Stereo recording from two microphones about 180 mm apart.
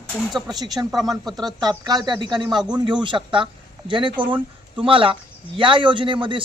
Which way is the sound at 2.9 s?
25° right (ahead or behind).